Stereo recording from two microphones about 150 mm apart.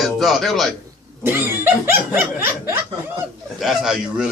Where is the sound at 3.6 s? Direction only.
5° right (ahead or behind).